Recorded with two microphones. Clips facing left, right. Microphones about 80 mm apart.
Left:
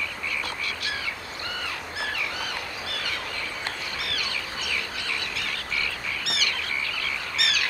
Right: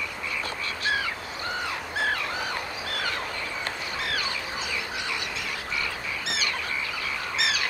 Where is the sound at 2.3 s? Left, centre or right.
Right.